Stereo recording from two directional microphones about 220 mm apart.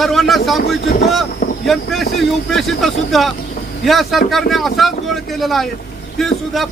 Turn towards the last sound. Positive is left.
turn(degrees=0)  # may be behind; listen again after turning